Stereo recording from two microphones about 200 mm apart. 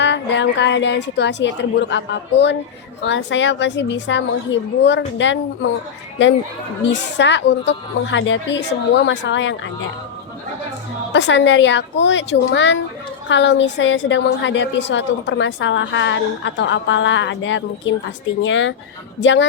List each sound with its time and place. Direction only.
0.0 s a woman's voice: 60° left (ahead or behind)
6.9 s a woman's voice: 60° left (ahead or behind)
11.1 s a woman's voice: 60° left (ahead or behind)